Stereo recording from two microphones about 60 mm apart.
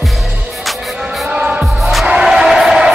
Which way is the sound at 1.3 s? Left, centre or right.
Centre.